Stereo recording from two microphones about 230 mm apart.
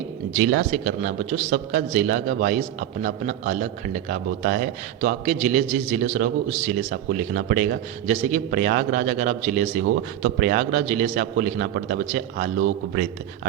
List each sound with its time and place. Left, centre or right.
0.3 s a man's voice: right
9.8 s a man's voice: right